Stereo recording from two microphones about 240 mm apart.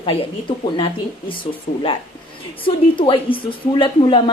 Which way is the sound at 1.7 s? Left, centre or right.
Left.